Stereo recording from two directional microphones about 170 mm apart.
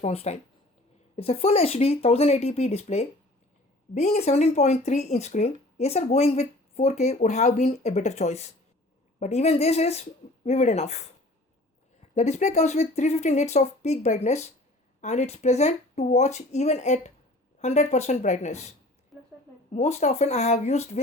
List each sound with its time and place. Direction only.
0.0 s speech: 40° left (ahead or behind)
12.1 s speech: 40° left (ahead or behind)
19.1 s a sound: centre (ahead or behind)
19.7 s speech: 40° left (ahead or behind)